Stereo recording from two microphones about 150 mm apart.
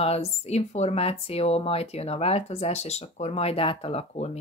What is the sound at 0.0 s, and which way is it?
Speech, 45° left (ahead or behind).